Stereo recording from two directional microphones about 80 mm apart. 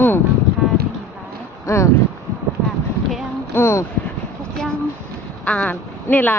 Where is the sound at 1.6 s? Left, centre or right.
Left.